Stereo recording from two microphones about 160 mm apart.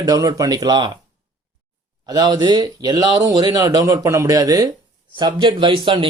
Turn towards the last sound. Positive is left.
turn(degrees=-35)  # may be behind; listen again after turning